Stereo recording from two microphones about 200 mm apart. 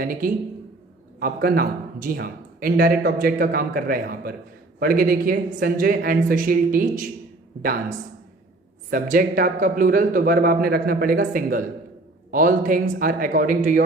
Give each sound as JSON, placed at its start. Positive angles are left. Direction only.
{"t": 0.0, "sound": "a man's voice", "side_deg": -45}